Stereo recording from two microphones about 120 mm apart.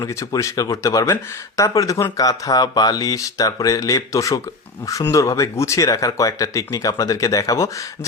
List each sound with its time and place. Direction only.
0.1 s speech: 25° left (ahead or behind)